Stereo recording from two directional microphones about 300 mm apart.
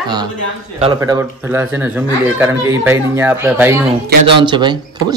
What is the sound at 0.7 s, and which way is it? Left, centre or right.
Speech, centre.